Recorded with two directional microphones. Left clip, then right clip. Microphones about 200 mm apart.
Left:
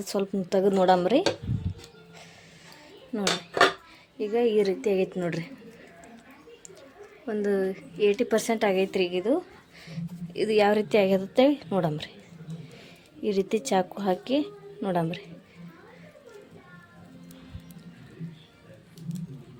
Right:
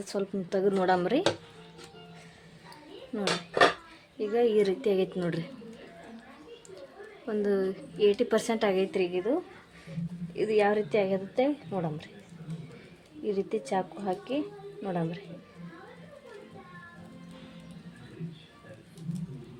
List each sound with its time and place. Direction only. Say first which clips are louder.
0.0 s a woman's voice: left 4 dB; 25° left (ahead or behind)
3.1 s a woman's voice: left 2 dB; 25° left (ahead or behind)
7.3 s a woman's voice: left 2 dB; 15° left (ahead or behind); by 12.0 s 35° left (ahead or behind)
13.2 s a woman's voice: left 4 dB; 35° left (ahead or behind)